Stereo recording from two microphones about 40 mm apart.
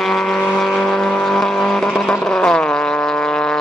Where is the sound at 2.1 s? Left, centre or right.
Centre.